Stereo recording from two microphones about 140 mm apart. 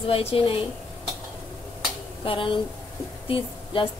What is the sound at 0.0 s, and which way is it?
Speech, 45° left (ahead or behind).